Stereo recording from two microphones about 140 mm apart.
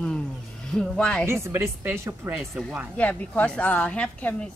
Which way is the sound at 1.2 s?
20° right (ahead or behind).